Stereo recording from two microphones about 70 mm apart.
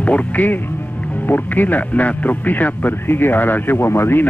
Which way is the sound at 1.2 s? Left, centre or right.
Left.